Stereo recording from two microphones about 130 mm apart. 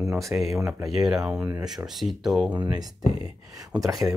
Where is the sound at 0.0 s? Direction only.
5° right (ahead or behind).